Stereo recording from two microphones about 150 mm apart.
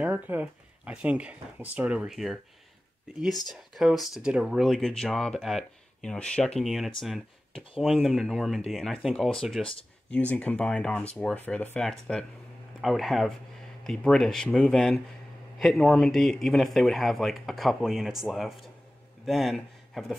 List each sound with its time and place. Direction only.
0.0 s speech: 10° right (ahead or behind)
3.4 s speech: centre (ahead or behind)